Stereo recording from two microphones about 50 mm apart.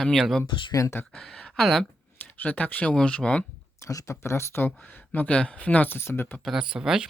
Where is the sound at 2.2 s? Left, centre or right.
Left.